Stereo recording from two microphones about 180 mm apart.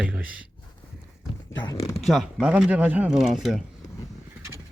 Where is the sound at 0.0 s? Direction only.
5° right (ahead or behind).